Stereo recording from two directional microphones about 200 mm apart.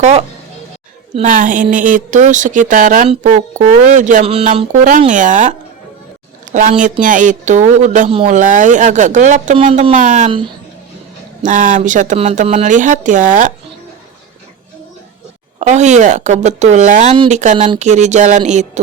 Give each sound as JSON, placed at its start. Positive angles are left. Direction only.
{"t": 0.0, "sound": "speech", "side_deg": -35}
{"t": 11.4, "sound": "speech", "side_deg": -40}
{"t": 15.5, "sound": "speech", "side_deg": -35}